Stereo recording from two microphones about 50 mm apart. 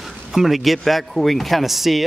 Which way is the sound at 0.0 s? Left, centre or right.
Centre.